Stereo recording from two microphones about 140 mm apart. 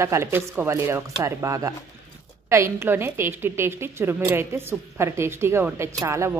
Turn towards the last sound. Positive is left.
turn(degrees=-20)  # may be behind; listen again after turning